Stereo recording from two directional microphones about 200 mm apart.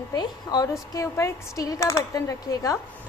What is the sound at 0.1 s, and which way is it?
A woman's voice, 20° left (ahead or behind).